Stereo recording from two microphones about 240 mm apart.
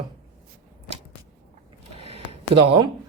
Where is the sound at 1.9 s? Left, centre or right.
Right.